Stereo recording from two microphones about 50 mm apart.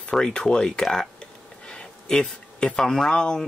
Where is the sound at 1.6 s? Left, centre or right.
Centre.